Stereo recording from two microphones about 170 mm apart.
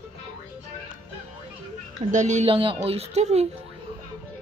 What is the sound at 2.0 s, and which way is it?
Speech, 45° right (ahead or behind).